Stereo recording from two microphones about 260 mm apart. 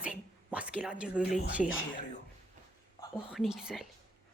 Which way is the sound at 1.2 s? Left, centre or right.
Left.